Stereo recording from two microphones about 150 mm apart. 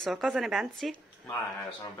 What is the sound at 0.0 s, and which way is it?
Speech, centre (ahead or behind).